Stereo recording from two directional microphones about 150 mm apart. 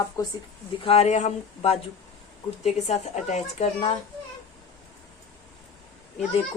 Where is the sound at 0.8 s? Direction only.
40° left (ahead or behind).